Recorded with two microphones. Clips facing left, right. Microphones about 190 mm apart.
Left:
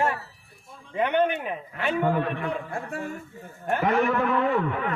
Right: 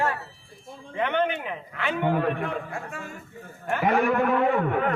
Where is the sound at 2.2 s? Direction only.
50° right (ahead or behind).